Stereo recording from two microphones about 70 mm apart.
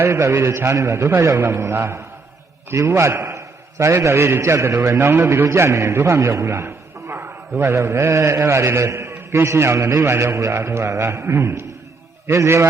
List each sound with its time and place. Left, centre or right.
0.0 s a man's voice: right
6.3 s a sound: right
7.6 s a man's voice: right